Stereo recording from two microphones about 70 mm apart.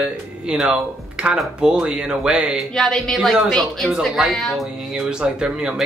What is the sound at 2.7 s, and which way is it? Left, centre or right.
A woman's voice, centre.